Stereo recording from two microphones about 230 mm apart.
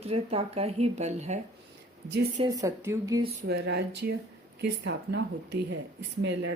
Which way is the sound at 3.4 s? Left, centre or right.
Right.